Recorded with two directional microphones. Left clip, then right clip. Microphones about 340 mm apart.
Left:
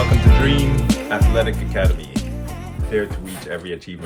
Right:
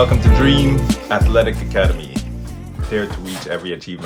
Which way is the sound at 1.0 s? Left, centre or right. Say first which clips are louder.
Right 6 dB; centre.